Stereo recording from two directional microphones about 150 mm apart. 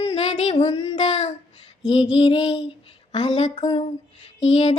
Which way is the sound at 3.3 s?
45° left (ahead or behind).